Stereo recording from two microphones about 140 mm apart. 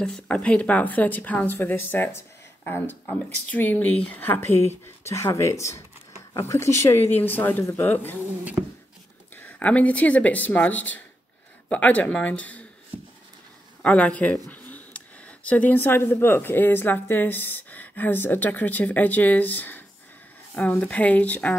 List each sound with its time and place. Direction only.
0.0 s speech: 5° left (ahead or behind)
9.3 s speech: 10° left (ahead or behind)
13.8 s speech: 10° left (ahead or behind)